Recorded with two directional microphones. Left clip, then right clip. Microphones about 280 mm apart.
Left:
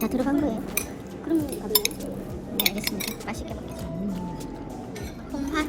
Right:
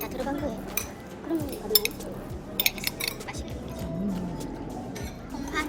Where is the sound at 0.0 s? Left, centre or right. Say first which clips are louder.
Left 6 dB; centre.